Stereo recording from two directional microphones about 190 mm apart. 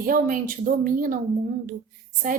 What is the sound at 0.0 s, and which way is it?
A woman's voice, 45° right (ahead or behind).